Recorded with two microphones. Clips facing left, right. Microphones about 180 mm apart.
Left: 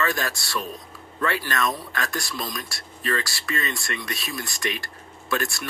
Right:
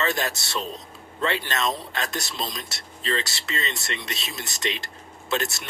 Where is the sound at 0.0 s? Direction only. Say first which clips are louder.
Even; 20° right (ahead or behind).